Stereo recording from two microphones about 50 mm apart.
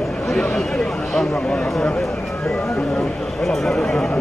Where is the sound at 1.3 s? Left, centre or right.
Left.